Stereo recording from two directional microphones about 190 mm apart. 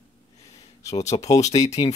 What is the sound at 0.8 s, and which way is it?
Speech, 35° left (ahead or behind).